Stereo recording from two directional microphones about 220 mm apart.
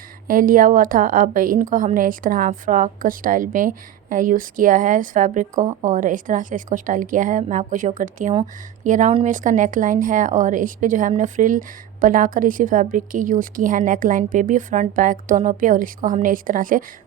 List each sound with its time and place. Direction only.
0.3 s a woman's voice: 40° right (ahead or behind)